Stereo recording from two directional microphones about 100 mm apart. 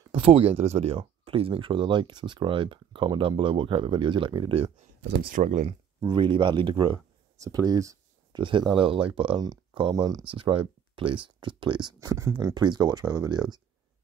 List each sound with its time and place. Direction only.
0.1 s speech: 65° right (ahead or behind)
6.0 s speech: 55° right (ahead or behind)
7.3 s speech: 35° right (ahead or behind)
8.4 s speech: 55° right (ahead or behind)
12.1 s speech: 30° right (ahead or behind)
12.5 s speech: 45° right (ahead or behind)